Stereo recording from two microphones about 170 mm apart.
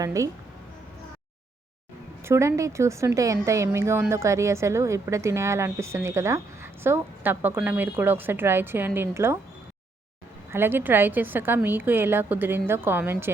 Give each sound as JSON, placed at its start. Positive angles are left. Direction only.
{"t": 0.0, "sound": "speech", "side_deg": -20}
{"t": 2.2, "sound": "a woman's voice", "side_deg": -15}
{"t": 10.5, "sound": "a woman's voice", "side_deg": -10}